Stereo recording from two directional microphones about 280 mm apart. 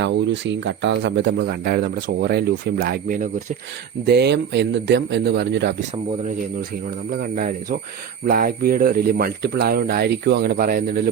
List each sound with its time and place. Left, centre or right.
0.0 s speech: right
7.1 s speech: right